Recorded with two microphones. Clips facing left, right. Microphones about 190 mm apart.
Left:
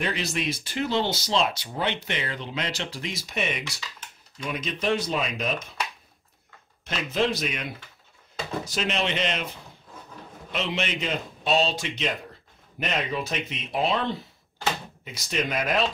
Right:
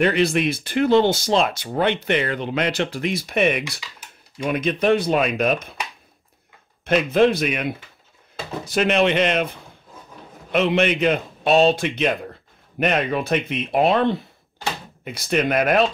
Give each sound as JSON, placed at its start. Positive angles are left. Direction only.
{"t": 0.0, "sound": "speech", "side_deg": -60}
{"t": 6.8, "sound": "speech", "side_deg": -55}